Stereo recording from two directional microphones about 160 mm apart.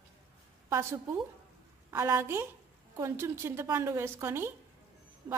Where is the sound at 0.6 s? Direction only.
20° right (ahead or behind).